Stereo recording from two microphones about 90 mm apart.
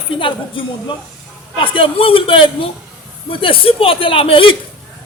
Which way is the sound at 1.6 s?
75° left (ahead or behind).